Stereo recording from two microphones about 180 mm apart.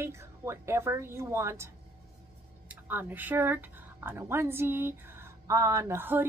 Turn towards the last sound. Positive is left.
turn(degrees=-10)  # may be behind; listen again after turning